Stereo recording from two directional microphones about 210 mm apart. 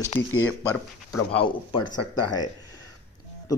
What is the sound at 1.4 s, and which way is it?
A man's voice, 20° left (ahead or behind).